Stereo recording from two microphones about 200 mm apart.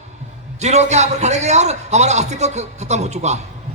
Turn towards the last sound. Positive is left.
turn(degrees=-35)  # may be behind; listen again after turning